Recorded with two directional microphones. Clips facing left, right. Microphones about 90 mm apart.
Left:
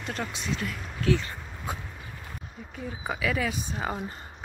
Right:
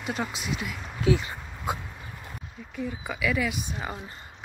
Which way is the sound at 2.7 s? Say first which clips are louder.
Right 1 dB; 35° left (ahead or behind).